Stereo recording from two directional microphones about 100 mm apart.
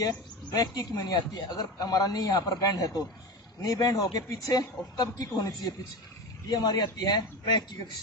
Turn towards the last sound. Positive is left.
turn(degrees=45)  # may be behind; listen again after turning